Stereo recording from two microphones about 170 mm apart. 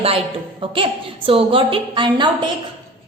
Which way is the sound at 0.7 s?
30° right (ahead or behind).